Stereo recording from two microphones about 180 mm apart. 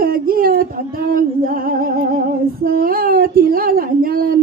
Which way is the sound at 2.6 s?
55° right (ahead or behind).